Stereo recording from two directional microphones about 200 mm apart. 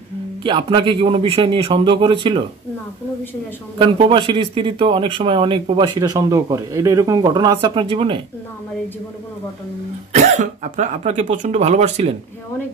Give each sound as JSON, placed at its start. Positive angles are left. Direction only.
{"t": 0.4, "sound": "speech", "side_deg": -25}
{"t": 3.7, "sound": "speech", "side_deg": -25}
{"t": 10.1, "sound": "speech", "side_deg": -35}